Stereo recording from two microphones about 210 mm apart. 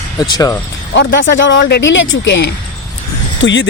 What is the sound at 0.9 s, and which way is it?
Speech, 60° left (ahead or behind).